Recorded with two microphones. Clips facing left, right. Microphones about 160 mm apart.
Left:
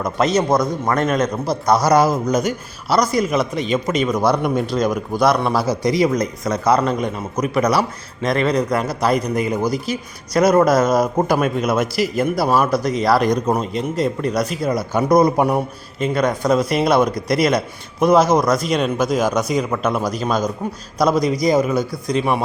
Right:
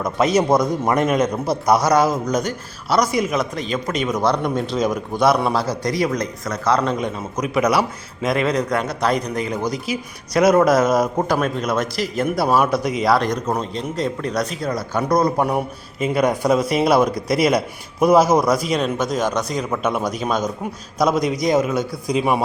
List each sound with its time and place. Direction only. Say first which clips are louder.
0.0 s a man's voice: even; 5° right (ahead or behind)
1.9 s a man's voice: left 2 dB; 10° left (ahead or behind)
5.5 s a man's voice: left 3 dB; 10° left (ahead or behind)
6.7 s a man's voice: left 2 dB; 5° left (ahead or behind)
13.2 s a man's voice: left 4 dB; 15° left (ahead or behind)
15.5 s a man's voice: left 1 dB; 5° right (ahead or behind)